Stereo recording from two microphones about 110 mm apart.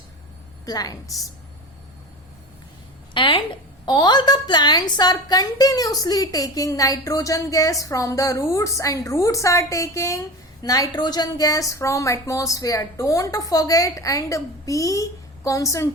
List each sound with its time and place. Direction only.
0.6 s a woman's voice: 35° left (ahead or behind)
3.2 s a woman's voice: 50° left (ahead or behind); by 15.9 s 30° left (ahead or behind)